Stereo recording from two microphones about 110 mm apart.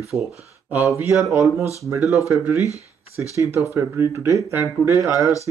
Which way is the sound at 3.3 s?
25° right (ahead or behind).